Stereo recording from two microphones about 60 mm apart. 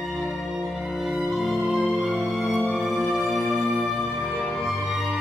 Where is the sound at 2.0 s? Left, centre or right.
Left.